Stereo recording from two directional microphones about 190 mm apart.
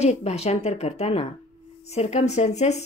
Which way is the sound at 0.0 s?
35° left (ahead or behind).